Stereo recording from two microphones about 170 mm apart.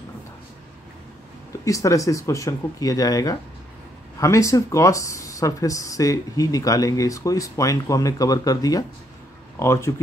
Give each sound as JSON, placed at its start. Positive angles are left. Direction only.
{"t": 1.6, "sound": "speech", "side_deg": 20}